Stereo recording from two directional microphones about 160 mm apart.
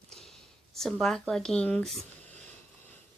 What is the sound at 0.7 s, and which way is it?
Speech, centre (ahead or behind).